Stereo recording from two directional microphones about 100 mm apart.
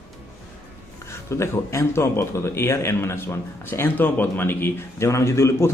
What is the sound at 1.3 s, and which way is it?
A man's voice, 30° left (ahead or behind).